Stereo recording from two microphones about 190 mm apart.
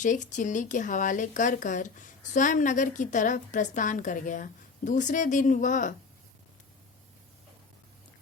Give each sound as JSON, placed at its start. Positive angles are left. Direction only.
{"t": 0.0, "sound": "speech", "side_deg": 40}